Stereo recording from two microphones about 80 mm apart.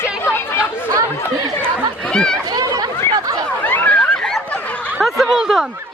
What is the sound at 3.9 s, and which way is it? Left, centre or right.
Snicker, centre.